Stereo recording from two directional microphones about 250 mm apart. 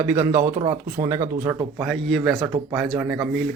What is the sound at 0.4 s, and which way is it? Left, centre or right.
Speech, right.